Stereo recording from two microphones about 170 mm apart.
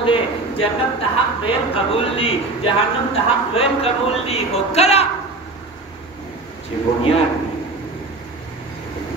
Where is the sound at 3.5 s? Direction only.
35° left (ahead or behind).